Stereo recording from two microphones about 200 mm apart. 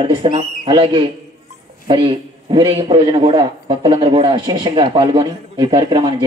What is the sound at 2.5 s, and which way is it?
A man's voice, 25° right (ahead or behind).